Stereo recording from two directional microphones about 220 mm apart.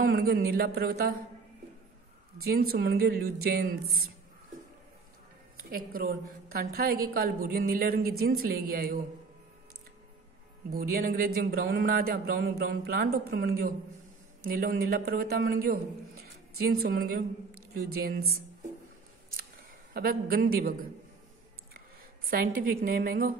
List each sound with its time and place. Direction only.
0.0 s a woman's voice: 45° right (ahead or behind)
2.4 s a woman's voice: 45° right (ahead or behind)
5.6 s a woman's voice: 40° right (ahead or behind)
10.7 s a man's voice: 40° right (ahead or behind)
19.9 s a woman's voice: 40° right (ahead or behind)
22.3 s a woman's voice: 40° right (ahead or behind)